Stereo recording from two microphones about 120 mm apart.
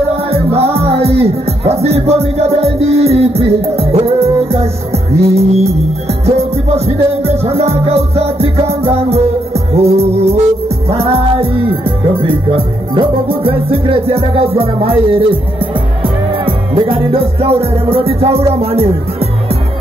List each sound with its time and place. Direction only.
0.7 s music: 55° right (ahead or behind)